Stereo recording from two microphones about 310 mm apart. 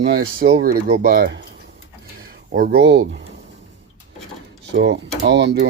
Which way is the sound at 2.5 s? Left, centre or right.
Right.